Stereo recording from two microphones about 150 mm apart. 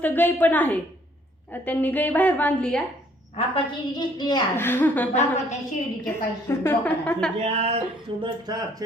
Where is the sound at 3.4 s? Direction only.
30° left (ahead or behind).